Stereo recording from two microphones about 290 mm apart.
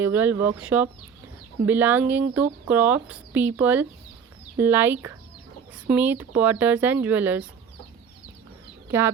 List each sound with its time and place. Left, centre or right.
0.0 s speech: centre
8.9 s speech: centre